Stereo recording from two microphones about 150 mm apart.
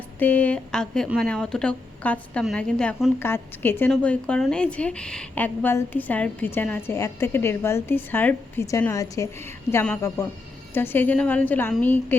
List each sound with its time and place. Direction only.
0.2 s a woman's voice: 10° left (ahead or behind)